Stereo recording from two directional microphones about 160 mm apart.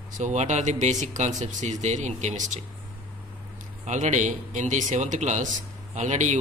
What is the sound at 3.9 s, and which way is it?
Speech, 50° right (ahead or behind).